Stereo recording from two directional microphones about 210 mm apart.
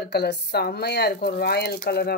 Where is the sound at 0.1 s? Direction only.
50° left (ahead or behind).